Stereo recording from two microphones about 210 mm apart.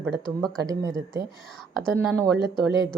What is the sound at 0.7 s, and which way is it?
Speech, 15° right (ahead or behind).